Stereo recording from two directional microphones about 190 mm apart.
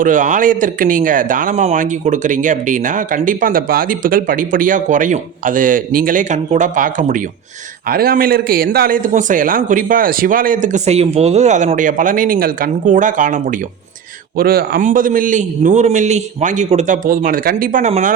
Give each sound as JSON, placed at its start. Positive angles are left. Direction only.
{"t": 0.0, "sound": "speech", "side_deg": -40}